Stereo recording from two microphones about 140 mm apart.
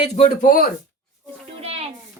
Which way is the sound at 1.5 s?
45° right (ahead or behind).